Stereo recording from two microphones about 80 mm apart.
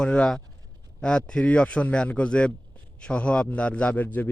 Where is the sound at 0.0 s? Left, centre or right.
Centre.